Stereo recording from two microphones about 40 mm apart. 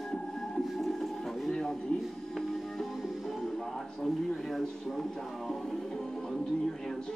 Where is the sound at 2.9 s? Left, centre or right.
Centre.